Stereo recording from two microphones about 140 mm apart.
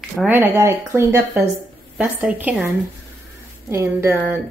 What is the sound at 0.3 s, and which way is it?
Speech, 15° right (ahead or behind).